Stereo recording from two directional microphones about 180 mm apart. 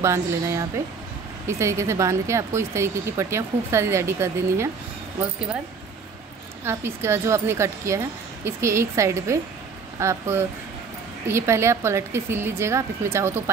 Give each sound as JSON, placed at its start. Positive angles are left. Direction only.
{"t": 0.0, "sound": "speech", "side_deg": -15}
{"t": 6.6, "sound": "speech", "side_deg": -15}